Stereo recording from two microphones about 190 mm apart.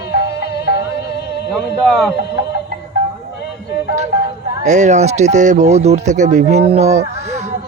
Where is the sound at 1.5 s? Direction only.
5° left (ahead or behind).